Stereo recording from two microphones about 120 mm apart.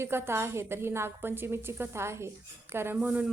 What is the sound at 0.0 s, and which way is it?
A woman's voice, 20° right (ahead or behind).